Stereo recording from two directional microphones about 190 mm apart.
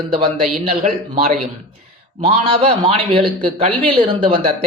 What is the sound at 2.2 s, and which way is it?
A man's voice, 30° right (ahead or behind).